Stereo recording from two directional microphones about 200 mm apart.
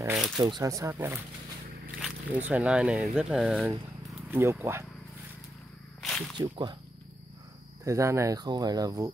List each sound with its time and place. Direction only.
0.4 s speech: 20° right (ahead or behind)
5.9 s snake: centre (ahead or behind)
6.3 s speech: 20° right (ahead or behind)
7.8 s speech: 15° right (ahead or behind)